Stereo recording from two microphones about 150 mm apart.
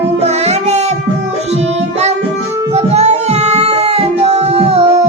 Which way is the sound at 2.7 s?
45° right (ahead or behind).